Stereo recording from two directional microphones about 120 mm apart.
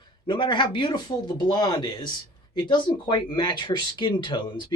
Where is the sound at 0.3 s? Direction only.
40° left (ahead or behind).